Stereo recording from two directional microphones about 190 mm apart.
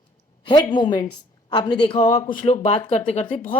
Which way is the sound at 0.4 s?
25° left (ahead or behind).